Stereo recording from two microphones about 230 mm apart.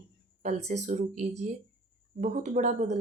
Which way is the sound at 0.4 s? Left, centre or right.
Right.